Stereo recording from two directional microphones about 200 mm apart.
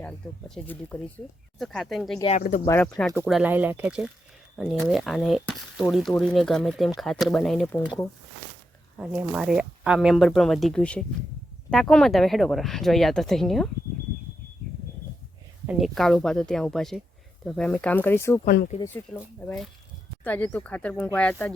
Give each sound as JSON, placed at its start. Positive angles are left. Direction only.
{"t": 0.0, "sound": "speech", "side_deg": 5}
{"t": 2.6, "sound": "speech", "side_deg": 15}
{"t": 3.2, "sound": "speech", "side_deg": -5}
{"t": 9.0, "sound": "speech", "side_deg": -5}
{"t": 15.6, "sound": "speech", "side_deg": -5}
{"t": 18.4, "sound": "speech", "side_deg": 55}
{"t": 18.8, "sound": "speech", "side_deg": 10}